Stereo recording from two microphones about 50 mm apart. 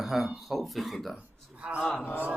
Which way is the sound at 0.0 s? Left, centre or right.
Centre.